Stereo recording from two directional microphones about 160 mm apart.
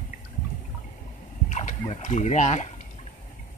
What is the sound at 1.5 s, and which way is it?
Splash, 50° left (ahead or behind).